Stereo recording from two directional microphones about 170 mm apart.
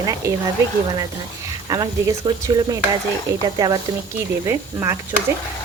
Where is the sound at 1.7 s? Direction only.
20° right (ahead or behind).